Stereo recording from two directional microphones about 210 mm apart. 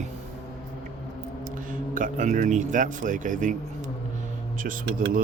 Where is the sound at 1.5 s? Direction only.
40° right (ahead or behind).